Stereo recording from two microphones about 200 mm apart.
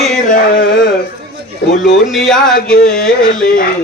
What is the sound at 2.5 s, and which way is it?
Speech, 50° left (ahead or behind).